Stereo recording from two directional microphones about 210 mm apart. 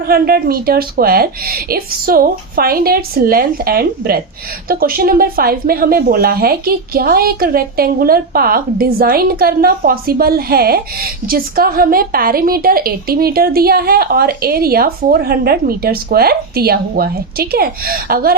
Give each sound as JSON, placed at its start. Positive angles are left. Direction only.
{"t": 0.0, "sound": "a woman's voice", "side_deg": -45}